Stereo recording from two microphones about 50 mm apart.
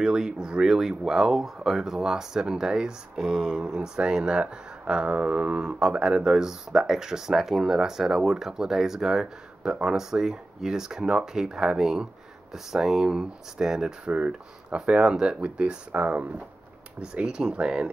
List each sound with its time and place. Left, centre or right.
0.0 s speech: centre
15.9 s speech: right
17.0 s speech: centre